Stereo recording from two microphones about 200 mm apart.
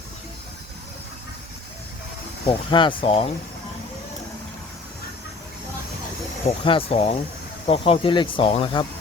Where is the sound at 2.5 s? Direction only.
25° left (ahead or behind).